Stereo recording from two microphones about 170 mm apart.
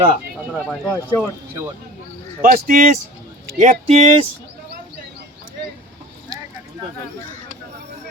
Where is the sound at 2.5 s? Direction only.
55° right (ahead or behind).